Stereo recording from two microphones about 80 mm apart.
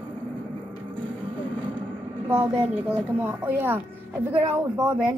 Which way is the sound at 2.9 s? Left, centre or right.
Right.